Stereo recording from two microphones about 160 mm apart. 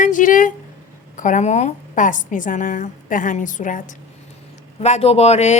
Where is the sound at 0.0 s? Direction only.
55° left (ahead or behind).